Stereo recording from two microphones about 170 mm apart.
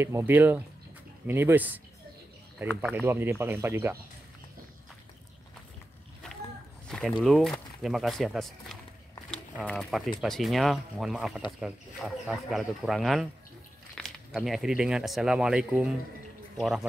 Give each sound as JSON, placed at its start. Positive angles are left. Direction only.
{"t": 0.0, "sound": "speech", "side_deg": -15}
{"t": 2.8, "sound": "speech", "side_deg": -10}
{"t": 6.9, "sound": "a man's voice", "side_deg": 0}